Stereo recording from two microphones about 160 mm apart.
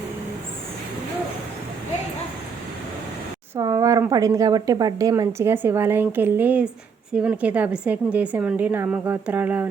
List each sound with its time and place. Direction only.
3.5 s speech: 20° right (ahead or behind)